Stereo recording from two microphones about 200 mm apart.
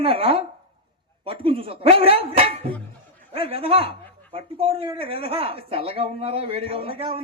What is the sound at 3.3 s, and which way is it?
Speech, 30° right (ahead or behind).